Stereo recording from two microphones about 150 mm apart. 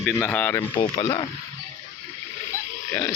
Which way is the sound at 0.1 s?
15° left (ahead or behind).